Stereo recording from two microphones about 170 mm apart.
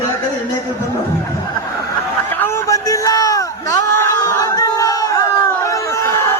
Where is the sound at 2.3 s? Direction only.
15° left (ahead or behind).